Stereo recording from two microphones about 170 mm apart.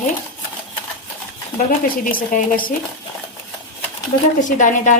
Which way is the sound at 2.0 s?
55° left (ahead or behind).